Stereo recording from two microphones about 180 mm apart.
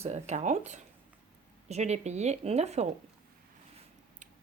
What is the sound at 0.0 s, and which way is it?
Speech, 40° right (ahead or behind).